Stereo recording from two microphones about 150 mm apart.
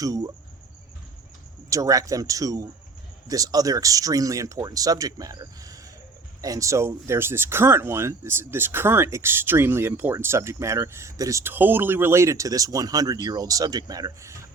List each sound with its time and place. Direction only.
0.0 s speech: 25° right (ahead or behind)
1.7 s speech: 20° right (ahead or behind)